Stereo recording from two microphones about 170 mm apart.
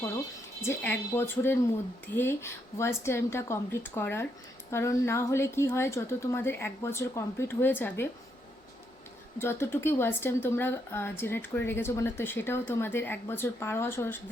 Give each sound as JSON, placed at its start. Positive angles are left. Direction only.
{"t": 0.6, "sound": "a woman's voice", "side_deg": 15}
{"t": 9.4, "sound": "a woman's voice", "side_deg": 15}